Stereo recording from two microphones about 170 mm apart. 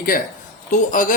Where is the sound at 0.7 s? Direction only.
50° left (ahead or behind).